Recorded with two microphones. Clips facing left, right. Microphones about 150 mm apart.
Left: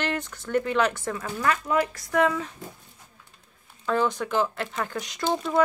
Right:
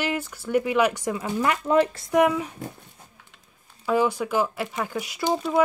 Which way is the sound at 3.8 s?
10° right (ahead or behind).